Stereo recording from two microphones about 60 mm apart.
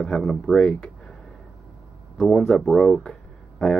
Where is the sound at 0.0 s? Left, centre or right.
Centre.